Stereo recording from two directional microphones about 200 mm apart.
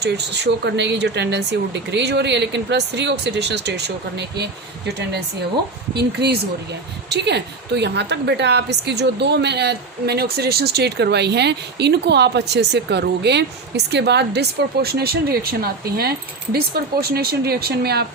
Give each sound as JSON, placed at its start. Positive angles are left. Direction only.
{"t": 0.0, "sound": "a woman's voice", "side_deg": -60}